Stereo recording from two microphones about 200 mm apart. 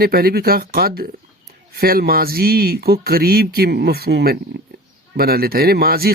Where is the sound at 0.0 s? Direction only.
50° right (ahead or behind).